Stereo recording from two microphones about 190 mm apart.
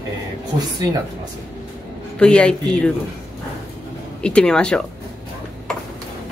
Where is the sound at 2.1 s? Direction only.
5° left (ahead or behind).